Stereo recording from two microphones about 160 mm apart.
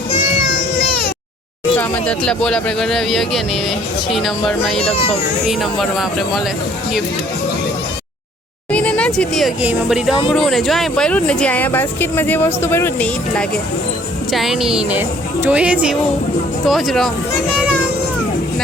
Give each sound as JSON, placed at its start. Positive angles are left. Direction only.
{"t": 1.8, "sound": "speech", "side_deg": 5}
{"t": 4.8, "sound": "speech", "side_deg": 40}
{"t": 6.0, "sound": "speech", "side_deg": 0}
{"t": 8.7, "sound": "a sound", "side_deg": 5}
{"t": 9.6, "sound": "speech", "side_deg": -5}
{"t": 14.3, "sound": "speech", "side_deg": 0}